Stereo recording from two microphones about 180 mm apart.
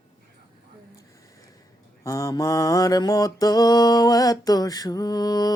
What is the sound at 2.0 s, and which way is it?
Mantra, 20° left (ahead or behind).